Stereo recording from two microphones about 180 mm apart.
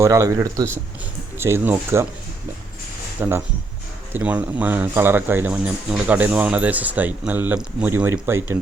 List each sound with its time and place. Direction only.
0.0 s speech: 15° right (ahead or behind)
3.2 s speech: 15° right (ahead or behind)